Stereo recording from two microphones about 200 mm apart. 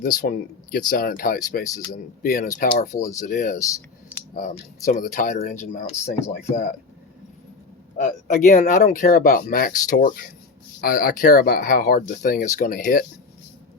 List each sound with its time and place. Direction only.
0.0 s speech: 45° left (ahead or behind)
2.9 s speech: 15° left (ahead or behind)
3.2 s speech: 40° left (ahead or behind)
4.9 s speech: 40° left (ahead or behind)
5.8 s speech: 15° left (ahead or behind)
6.4 s speech: 40° left (ahead or behind)
7.9 s speech: 40° left (ahead or behind)